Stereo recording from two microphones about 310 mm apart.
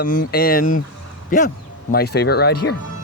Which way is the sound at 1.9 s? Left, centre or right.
Left.